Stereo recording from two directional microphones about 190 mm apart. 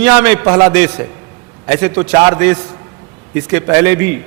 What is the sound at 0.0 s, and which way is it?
A woman's voice, 10° right (ahead or behind).